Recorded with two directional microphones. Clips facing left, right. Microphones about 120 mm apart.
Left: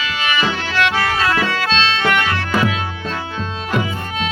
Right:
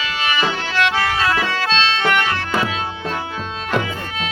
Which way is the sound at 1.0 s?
15° right (ahead or behind).